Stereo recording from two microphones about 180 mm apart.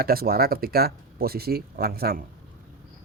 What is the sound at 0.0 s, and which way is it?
Speech, 55° right (ahead or behind).